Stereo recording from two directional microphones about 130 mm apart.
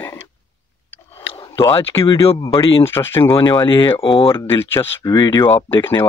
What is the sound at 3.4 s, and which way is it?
Speech, 35° left (ahead or behind).